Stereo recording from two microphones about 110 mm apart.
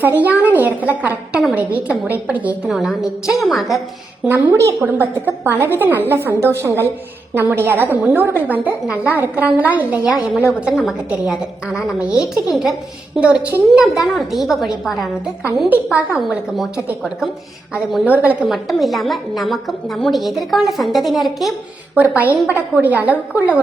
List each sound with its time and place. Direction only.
0.0 s a woman's voice: 15° right (ahead or behind)
2.6 s a woman's voice: centre (ahead or behind)
4.5 s a woman's voice: 30° right (ahead or behind)
4.9 s a woman's voice: 15° right (ahead or behind); by 15.1 s centre (ahead or behind)
15.7 s a woman's voice: 15° right (ahead or behind)
18.0 s a woman's voice: 15° right (ahead or behind)
18.4 s a woman's voice: centre (ahead or behind)
21.9 s a woman's voice: 15° right (ahead or behind)